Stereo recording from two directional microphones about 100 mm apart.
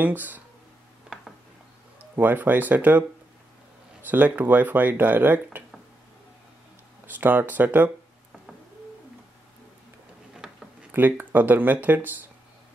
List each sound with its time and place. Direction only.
0.0 s speech: 20° right (ahead or behind)
2.1 s speech: 20° right (ahead or behind)
4.1 s speech: 20° right (ahead or behind)
7.1 s speech: 20° right (ahead or behind)
10.3 s a sound: 5° right (ahead or behind)
10.9 s speech: 20° right (ahead or behind)